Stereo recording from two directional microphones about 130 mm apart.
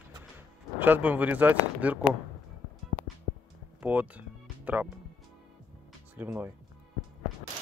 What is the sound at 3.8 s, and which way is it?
Speech, 15° right (ahead or behind).